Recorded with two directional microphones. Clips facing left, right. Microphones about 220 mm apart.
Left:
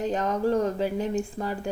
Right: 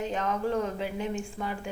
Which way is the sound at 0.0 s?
40° left (ahead or behind).